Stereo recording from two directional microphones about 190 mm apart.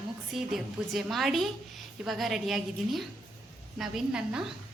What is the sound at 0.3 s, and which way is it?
A woman's voice, centre (ahead or behind).